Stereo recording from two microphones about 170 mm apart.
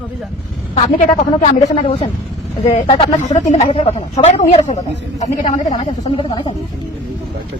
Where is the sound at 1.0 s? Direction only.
45° left (ahead or behind).